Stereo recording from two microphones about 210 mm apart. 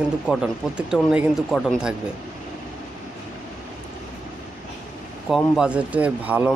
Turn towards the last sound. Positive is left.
turn(degrees=-5)  # may be behind; listen again after turning